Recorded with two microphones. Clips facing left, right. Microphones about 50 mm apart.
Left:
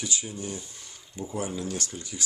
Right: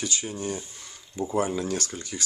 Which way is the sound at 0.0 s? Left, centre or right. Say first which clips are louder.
Right 3 dB; right.